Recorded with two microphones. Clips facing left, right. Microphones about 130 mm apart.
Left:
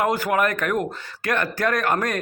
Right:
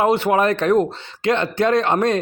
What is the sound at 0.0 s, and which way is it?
A man's voice, 25° right (ahead or behind).